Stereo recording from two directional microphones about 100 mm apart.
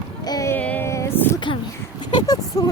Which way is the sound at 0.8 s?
30° left (ahead or behind).